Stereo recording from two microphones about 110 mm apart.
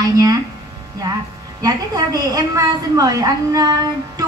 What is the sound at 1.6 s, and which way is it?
A woman's voice, 35° right (ahead or behind).